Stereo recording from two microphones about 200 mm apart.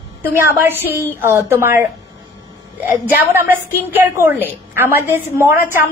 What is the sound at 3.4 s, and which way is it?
A woman's voice, 10° right (ahead or behind).